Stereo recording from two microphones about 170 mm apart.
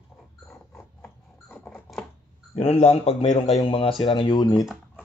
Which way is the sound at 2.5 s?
40° left (ahead or behind).